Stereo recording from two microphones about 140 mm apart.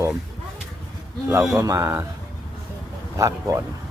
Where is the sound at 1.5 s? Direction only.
20° right (ahead or behind).